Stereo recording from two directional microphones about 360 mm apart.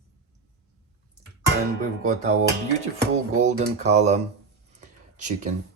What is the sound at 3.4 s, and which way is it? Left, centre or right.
Speech, centre.